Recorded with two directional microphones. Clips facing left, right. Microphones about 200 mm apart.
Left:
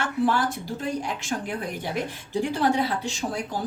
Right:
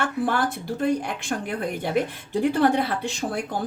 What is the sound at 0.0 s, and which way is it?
Speech, 55° right (ahead or behind).